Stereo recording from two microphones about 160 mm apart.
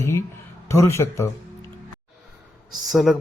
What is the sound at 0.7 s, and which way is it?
Speech, 15° left (ahead or behind).